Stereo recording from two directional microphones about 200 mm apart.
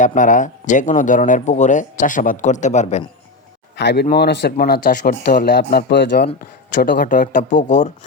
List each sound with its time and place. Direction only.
0.0 s speech: 40° left (ahead or behind)
3.8 s speech: 60° left (ahead or behind); by 7.9 s 35° left (ahead or behind)